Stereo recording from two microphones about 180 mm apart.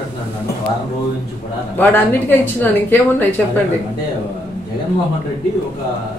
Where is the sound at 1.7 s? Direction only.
10° left (ahead or behind).